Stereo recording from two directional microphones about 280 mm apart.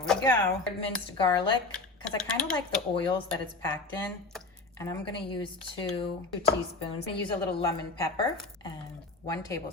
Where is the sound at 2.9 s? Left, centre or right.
Centre.